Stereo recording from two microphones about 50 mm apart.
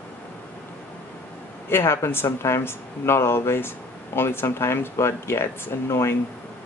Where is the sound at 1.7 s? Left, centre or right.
Left.